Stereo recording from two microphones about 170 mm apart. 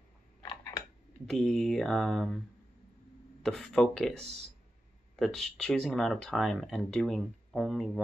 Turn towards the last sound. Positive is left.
turn(degrees=0)  # may be behind; listen again after turning